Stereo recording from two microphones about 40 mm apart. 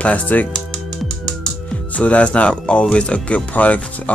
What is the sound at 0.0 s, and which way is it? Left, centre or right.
Speech, left.